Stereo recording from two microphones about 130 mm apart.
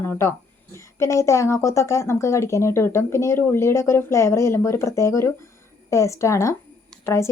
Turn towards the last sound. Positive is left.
turn(degrees=20)  # may be behind; listen again after turning